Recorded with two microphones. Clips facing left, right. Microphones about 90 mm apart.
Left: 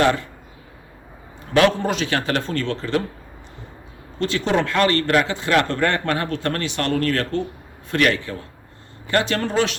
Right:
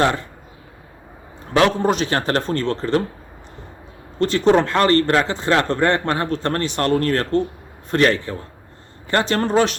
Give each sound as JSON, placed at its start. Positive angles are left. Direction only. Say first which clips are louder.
{"t": 0.0, "sound": "speech", "louder": "even", "side_deg": -30}
{"t": 1.5, "sound": "a man's voice", "louder": "right 1 dB", "side_deg": -30}
{"t": 4.2, "sound": "speech", "louder": "right 5 dB", "side_deg": -35}